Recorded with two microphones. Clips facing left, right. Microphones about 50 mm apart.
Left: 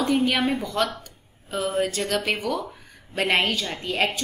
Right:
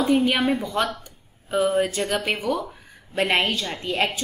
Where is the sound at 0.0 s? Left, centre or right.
Centre.